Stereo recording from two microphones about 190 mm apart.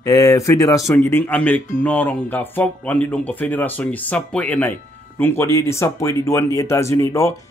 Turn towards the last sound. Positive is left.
turn(degrees=15)  # may be behind; listen again after turning